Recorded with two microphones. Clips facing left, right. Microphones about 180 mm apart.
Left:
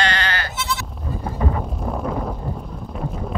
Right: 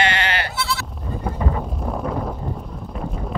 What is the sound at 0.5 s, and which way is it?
Goat, 20° left (ahead or behind).